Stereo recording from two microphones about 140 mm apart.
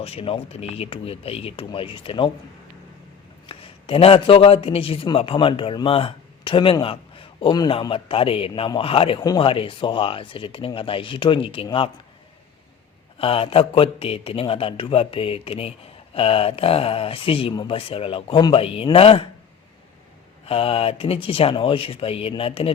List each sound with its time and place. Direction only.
0.0 s speech: 45° left (ahead or behind)
3.4 s a man's voice: 40° left (ahead or behind)
13.1 s a man's voice: 40° left (ahead or behind)
20.4 s speech: 40° left (ahead or behind)